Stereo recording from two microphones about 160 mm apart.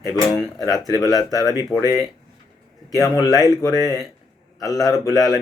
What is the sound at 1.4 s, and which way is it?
Mantra, 20° left (ahead or behind).